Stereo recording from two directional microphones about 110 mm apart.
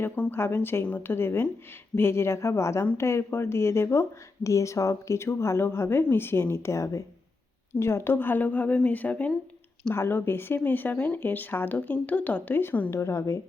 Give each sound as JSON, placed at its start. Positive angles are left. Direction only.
{"t": 0.2, "sound": "speech", "side_deg": 20}